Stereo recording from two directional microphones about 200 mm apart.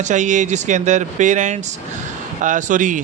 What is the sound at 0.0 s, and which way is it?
Speech, 40° right (ahead or behind).